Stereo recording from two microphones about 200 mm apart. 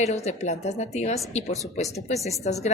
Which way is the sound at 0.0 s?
35° left (ahead or behind).